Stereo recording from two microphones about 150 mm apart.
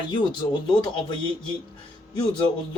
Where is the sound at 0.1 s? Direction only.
30° left (ahead or behind).